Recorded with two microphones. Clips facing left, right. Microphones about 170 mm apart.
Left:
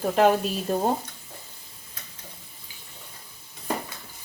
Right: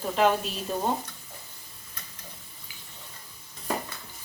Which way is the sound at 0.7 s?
50° left (ahead or behind).